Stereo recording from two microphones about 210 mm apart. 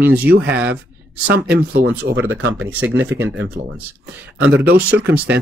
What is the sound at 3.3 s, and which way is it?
Speech, 55° right (ahead or behind).